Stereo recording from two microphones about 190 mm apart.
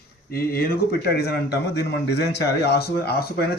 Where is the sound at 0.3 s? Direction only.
50° left (ahead or behind).